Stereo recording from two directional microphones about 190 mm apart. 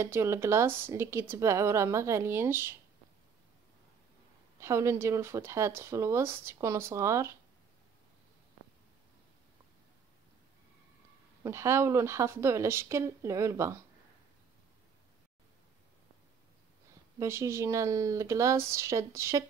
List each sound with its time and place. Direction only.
0.0 s speech: 15° right (ahead or behind)
4.6 s speech: 15° right (ahead or behind)
11.4 s speech: 15° right (ahead or behind)
17.2 s speech: 15° right (ahead or behind)